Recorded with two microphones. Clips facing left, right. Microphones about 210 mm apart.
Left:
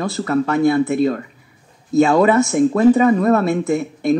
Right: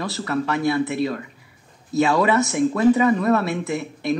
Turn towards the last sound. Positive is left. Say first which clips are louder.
# left 7 dB
turn(degrees=50)  # may be behind; listen again after turning